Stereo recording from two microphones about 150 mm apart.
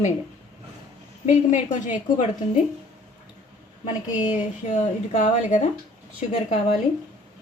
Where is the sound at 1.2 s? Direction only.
50° left (ahead or behind).